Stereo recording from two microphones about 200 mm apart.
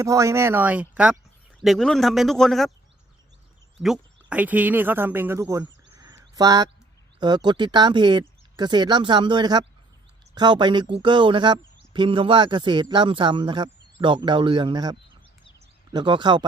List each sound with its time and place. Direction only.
0.0 s speech: 15° right (ahead or behind); by 2.7 s centre (ahead or behind)
3.8 s speech: centre (ahead or behind); by 14.9 s 20° right (ahead or behind)
15.5 s a sound: 20° right (ahead or behind)